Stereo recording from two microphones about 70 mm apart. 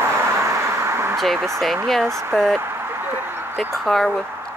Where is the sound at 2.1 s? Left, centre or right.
Right.